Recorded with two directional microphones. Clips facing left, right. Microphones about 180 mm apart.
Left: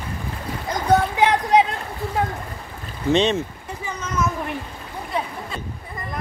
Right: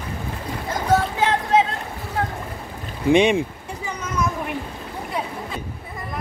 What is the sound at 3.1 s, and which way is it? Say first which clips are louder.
Speech: right 3 dB; 15° right (ahead or behind).